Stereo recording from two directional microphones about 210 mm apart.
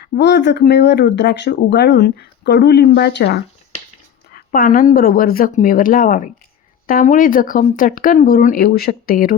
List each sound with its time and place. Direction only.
0.0 s speech: 50° left (ahead or behind)